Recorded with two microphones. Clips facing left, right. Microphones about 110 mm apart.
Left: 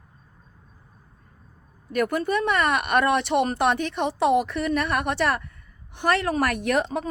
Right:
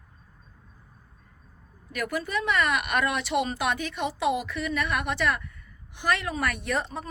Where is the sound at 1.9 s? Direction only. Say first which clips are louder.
Left 6 dB; 50° left (ahead or behind).